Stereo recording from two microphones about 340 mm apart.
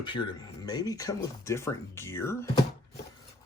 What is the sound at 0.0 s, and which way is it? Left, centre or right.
Speech, centre.